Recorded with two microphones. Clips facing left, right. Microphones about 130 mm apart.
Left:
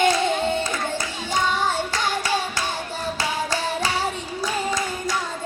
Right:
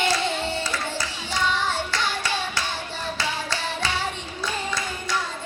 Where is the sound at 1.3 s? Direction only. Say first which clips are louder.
Left 3 dB; 45° left (ahead or behind).